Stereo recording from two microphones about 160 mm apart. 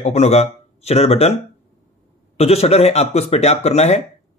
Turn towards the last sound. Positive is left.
turn(degrees=40)  # may be behind; listen again after turning